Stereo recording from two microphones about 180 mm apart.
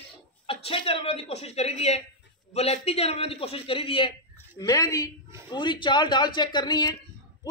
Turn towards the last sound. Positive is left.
turn(degrees=25)  # may be behind; listen again after turning